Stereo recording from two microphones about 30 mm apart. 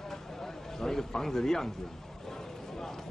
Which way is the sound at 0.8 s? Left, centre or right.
Centre.